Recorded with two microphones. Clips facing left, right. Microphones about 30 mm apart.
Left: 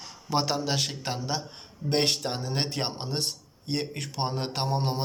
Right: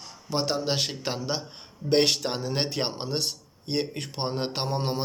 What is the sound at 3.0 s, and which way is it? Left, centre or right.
Speech, right.